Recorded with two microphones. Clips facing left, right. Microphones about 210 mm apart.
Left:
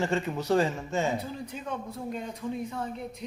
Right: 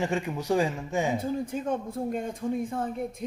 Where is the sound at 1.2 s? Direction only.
50° right (ahead or behind).